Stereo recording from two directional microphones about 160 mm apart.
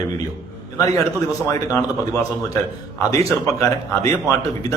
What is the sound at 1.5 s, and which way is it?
Speech, 20° left (ahead or behind).